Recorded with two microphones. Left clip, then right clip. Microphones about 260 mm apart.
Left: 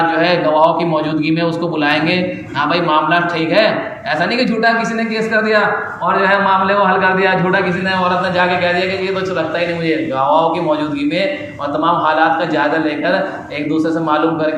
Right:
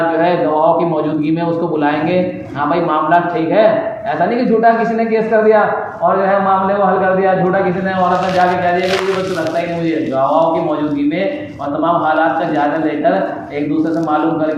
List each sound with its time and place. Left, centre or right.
1.8 s speech: left